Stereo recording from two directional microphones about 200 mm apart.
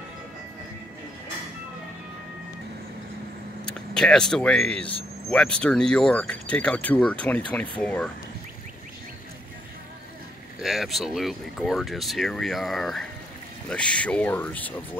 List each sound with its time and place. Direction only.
3.6 s speech: 5° left (ahead or behind)
10.6 s speech: centre (ahead or behind)